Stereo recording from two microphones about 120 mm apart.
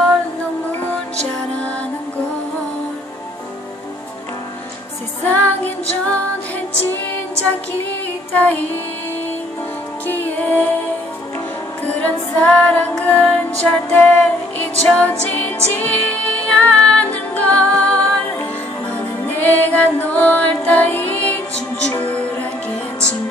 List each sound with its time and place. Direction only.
5.2 s music: 15° left (ahead or behind)
8.3 s music: 15° left (ahead or behind)
10.0 s music: 15° left (ahead or behind)
11.9 s music: 15° left (ahead or behind)